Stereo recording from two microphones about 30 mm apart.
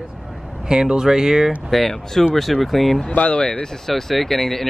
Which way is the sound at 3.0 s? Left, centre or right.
Left.